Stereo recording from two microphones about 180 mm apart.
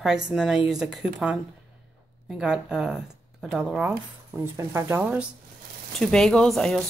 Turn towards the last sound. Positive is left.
turn(degrees=0)  # may be behind; listen again after turning